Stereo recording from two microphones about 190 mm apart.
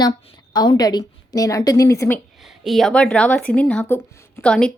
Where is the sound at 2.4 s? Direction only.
Centre (ahead or behind).